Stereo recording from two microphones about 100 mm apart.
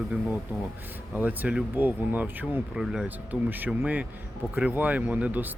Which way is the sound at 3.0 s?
15° right (ahead or behind).